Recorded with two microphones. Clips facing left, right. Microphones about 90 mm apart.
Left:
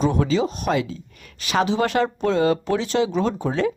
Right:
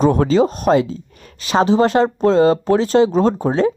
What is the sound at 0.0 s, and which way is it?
Speech, 45° right (ahead or behind).